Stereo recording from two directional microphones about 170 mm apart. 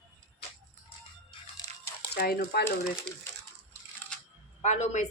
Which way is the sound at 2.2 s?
65° left (ahead or behind).